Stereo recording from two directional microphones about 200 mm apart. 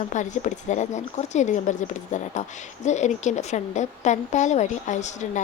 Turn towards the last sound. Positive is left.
turn(degrees=35)  # may be behind; listen again after turning